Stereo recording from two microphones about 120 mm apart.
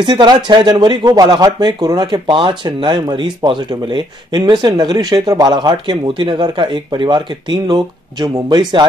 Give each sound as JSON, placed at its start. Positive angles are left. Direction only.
{"t": 0.0, "sound": "speech", "side_deg": -40}